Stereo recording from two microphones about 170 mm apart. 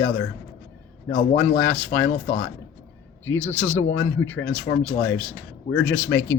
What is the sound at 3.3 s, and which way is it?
Speech, 10° left (ahead or behind).